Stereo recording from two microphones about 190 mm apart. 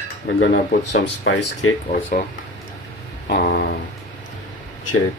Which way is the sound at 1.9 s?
45° left (ahead or behind).